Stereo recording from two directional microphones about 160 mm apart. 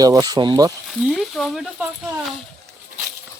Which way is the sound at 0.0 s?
25° right (ahead or behind).